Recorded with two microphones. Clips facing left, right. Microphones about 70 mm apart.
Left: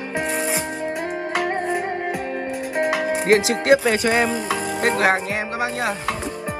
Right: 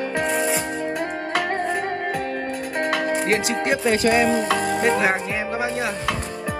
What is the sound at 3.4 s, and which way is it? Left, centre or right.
Music, left.